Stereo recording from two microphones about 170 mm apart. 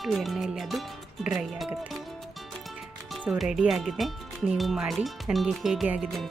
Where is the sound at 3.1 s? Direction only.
5° right (ahead or behind).